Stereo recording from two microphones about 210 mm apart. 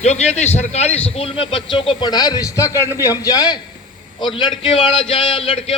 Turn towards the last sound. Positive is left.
turn(degrees=25)  # may be behind; listen again after turning